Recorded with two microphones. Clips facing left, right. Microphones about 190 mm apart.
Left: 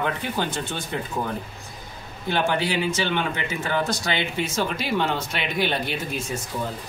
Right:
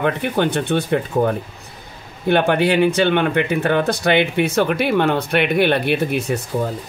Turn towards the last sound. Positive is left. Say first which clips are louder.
# right 10 dB
turn(degrees=-65)  # may be behind; listen again after turning